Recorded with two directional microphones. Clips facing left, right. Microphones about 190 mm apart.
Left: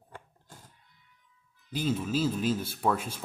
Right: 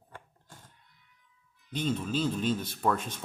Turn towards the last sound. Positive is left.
turn(degrees=10)  # may be behind; listen again after turning